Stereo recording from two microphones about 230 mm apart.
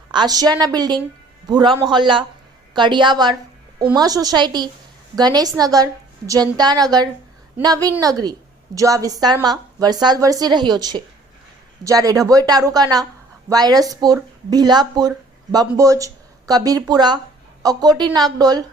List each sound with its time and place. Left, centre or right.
0.1 s a woman's voice: centre